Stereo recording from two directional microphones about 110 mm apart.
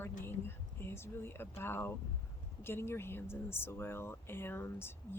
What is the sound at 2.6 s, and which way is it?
Speech, 20° left (ahead or behind).